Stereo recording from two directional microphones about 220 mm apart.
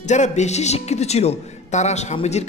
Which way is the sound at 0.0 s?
30° left (ahead or behind).